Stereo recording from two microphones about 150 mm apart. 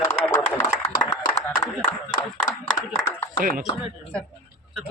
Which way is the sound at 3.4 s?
65° right (ahead or behind).